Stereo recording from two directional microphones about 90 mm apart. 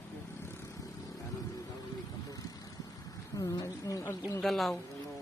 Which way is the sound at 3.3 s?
40° left (ahead or behind).